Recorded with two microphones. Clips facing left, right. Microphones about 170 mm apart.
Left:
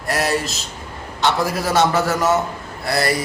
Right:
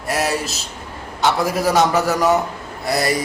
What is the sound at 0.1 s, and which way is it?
A man's voice, 10° right (ahead or behind).